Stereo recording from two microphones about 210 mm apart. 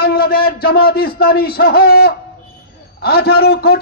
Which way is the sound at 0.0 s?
45° left (ahead or behind).